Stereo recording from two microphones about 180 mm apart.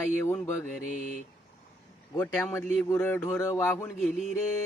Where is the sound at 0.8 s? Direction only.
45° left (ahead or behind).